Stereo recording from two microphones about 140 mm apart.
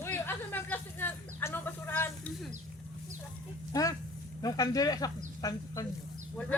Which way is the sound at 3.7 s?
25° left (ahead or behind).